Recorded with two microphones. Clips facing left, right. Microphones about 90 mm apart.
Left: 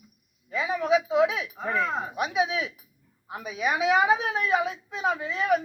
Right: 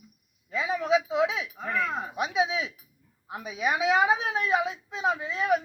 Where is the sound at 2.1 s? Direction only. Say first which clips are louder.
Right 1 dB; 25° right (ahead or behind).